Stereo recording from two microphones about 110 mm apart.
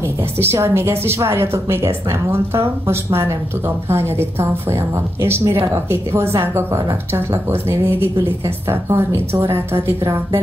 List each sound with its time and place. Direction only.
0.4 s a woman's voice: 20° right (ahead or behind)
8.6 s a woman's voice: 20° right (ahead or behind)